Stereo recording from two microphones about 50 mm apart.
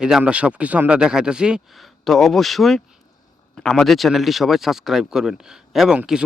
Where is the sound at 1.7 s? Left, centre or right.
Centre.